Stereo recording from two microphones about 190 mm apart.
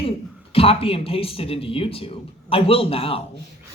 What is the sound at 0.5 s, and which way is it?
Speech, 30° left (ahead or behind).